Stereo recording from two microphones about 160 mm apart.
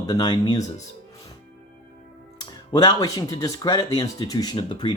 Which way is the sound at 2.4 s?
25° left (ahead or behind).